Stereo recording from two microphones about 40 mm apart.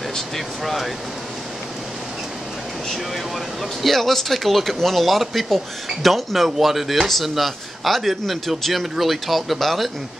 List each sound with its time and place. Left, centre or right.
3.8 s a man's voice: centre